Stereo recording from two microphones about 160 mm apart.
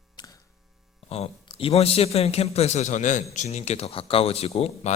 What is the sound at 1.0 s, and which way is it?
A man's voice, 40° left (ahead or behind).